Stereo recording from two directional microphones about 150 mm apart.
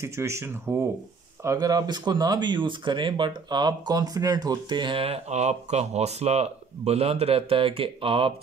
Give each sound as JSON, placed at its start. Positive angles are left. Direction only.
{"t": 0.0, "sound": "speech", "side_deg": -20}